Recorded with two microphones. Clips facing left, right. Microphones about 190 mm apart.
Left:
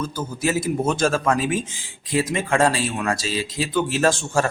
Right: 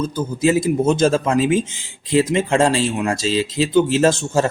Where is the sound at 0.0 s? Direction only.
20° right (ahead or behind).